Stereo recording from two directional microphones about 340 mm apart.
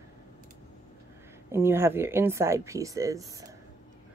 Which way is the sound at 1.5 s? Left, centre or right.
Centre.